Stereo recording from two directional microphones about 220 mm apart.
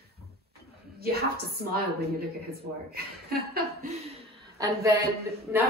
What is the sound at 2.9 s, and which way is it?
Speech, 45° right (ahead or behind).